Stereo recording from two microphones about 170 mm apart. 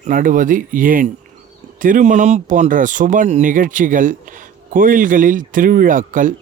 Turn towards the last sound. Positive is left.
turn(degrees=-50)  # may be behind; listen again after turning